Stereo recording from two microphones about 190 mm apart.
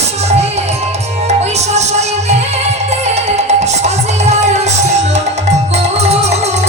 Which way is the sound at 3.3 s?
35° right (ahead or behind).